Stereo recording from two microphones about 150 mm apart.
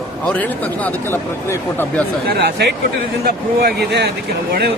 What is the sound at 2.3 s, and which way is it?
Speech, 90° right.